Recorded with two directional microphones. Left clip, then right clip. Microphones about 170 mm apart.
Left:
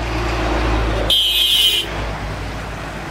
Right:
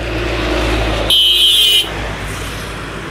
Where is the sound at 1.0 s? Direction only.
50° left (ahead or behind).